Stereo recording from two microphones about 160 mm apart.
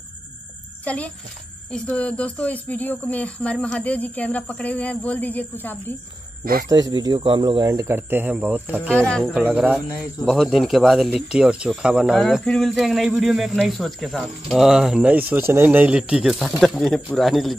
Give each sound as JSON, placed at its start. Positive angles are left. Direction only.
{"t": 0.8, "sound": "speech", "side_deg": 10}
{"t": 6.7, "sound": "speech", "side_deg": -25}
{"t": 8.9, "sound": "speech", "side_deg": 5}
{"t": 9.3, "sound": "speech", "side_deg": -5}